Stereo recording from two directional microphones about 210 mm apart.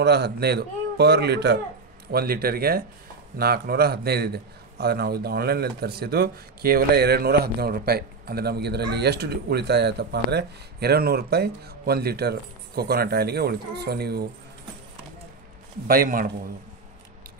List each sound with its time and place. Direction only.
0.0 s a man's voice: 50° right (ahead or behind)
15.9 s a man's voice: 45° right (ahead or behind)